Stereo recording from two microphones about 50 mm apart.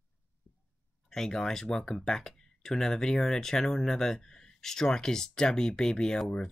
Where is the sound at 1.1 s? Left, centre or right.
Centre.